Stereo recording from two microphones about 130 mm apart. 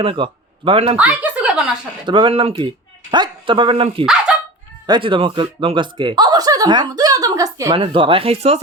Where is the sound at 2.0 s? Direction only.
40° right (ahead or behind).